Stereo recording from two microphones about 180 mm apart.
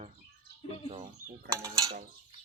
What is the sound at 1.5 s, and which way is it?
Mechanisms, 20° right (ahead or behind).